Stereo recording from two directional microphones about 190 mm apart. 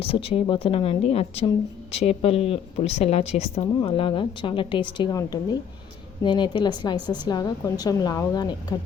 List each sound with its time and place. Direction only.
0.0 s a woman's voice: 30° left (ahead or behind)